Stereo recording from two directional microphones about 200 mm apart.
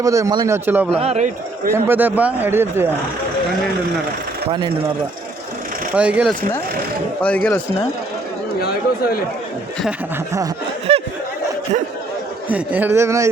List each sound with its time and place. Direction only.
0.0 s speech: 15° right (ahead or behind)
0.9 s a man's voice: 30° right (ahead or behind)
1.7 s speech: 10° right (ahead or behind)
5.9 s speech: 5° right (ahead or behind)
7.2 s speech: 5° left (ahead or behind)
10.9 s a sound: 30° right (ahead or behind)
12.5 s speech: 10° right (ahead or behind)